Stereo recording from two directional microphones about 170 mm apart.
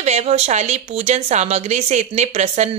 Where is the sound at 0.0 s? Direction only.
40° right (ahead or behind).